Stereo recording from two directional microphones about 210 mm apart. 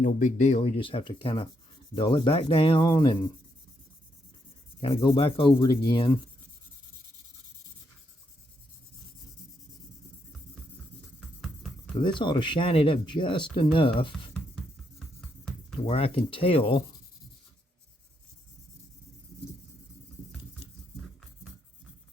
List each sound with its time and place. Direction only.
0.0 s speech: 35° left (ahead or behind); by 3.2 s 20° left (ahead or behind)
4.8 s speech: 25° left (ahead or behind)
11.9 s speech: 25° left (ahead or behind)
15.9 s speech: 25° left (ahead or behind)